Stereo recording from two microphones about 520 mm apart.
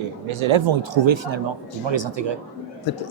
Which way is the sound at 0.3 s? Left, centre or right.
Right.